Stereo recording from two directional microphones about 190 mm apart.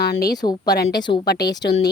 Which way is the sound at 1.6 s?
65° left (ahead or behind).